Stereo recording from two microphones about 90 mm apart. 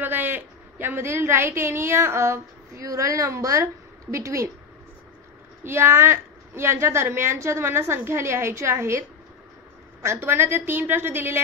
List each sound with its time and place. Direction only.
0.0 s a woman's voice: 20° right (ahead or behind)
5.6 s a woman's voice: 25° right (ahead or behind)
10.0 s a woman's voice: 25° right (ahead or behind)